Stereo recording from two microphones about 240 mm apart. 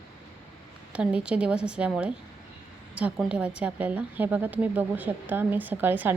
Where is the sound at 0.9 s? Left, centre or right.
Centre.